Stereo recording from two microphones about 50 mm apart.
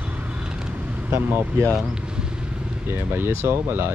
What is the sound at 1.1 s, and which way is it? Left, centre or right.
Speech, right.